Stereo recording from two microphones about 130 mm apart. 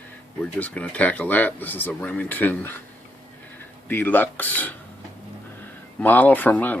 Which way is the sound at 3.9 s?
15° left (ahead or behind).